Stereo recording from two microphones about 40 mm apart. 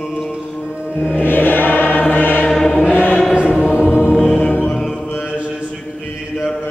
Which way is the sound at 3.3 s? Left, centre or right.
Right.